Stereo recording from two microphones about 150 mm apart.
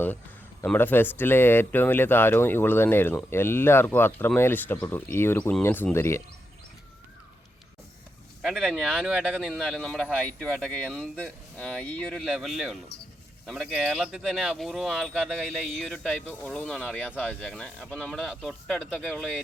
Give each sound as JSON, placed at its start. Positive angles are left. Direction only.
{"t": 0.6, "sound": "speech", "side_deg": 10}
{"t": 8.4, "sound": "speech", "side_deg": -5}
{"t": 15.1, "sound": "speech", "side_deg": -10}
{"t": 16.0, "sound": "speech", "side_deg": 10}